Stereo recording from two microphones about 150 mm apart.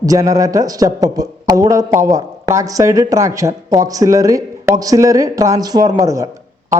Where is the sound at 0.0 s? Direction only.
25° right (ahead or behind).